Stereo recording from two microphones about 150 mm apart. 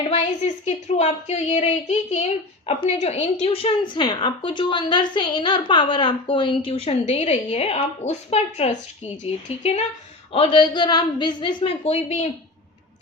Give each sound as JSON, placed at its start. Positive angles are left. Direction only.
{"t": 0.1, "sound": "a woman's voice", "side_deg": 45}